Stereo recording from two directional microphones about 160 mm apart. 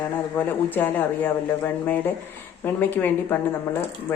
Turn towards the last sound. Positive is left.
turn(degrees=15)  # may be behind; listen again after turning